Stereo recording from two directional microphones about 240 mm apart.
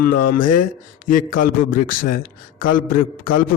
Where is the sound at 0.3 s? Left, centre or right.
Left.